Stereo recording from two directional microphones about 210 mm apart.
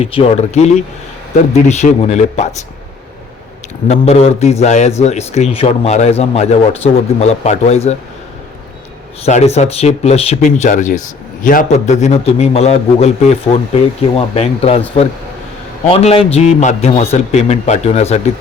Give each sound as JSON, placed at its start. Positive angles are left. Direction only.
{"t": 0.0, "sound": "speech", "side_deg": 30}
{"t": 3.8, "sound": "speech", "side_deg": 30}
{"t": 9.2, "sound": "speech", "side_deg": 30}